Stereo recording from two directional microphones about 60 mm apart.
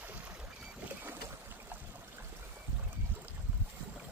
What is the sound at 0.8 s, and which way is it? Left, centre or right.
Boat, right.